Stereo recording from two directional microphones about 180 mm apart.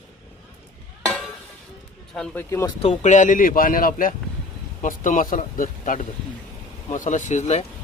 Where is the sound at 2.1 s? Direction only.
5° left (ahead or behind).